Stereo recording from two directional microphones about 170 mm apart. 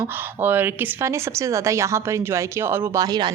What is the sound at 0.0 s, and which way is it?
A woman's voice, 10° right (ahead or behind).